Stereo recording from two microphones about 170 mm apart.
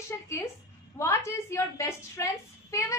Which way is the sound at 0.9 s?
15° left (ahead or behind).